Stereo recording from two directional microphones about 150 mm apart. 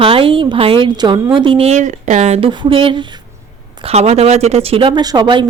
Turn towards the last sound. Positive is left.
turn(degrees=-30)  # may be behind; listen again after turning